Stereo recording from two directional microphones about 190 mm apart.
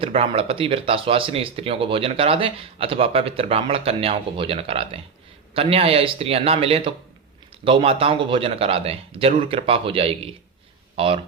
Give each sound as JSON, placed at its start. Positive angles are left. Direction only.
{"t": 0.0, "sound": "speech", "side_deg": -30}